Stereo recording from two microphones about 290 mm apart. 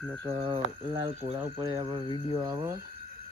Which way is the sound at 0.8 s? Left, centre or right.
Centre.